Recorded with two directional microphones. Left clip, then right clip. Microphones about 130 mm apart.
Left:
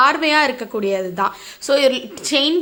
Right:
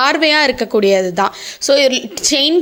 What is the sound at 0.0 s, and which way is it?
Speech, 35° right (ahead or behind).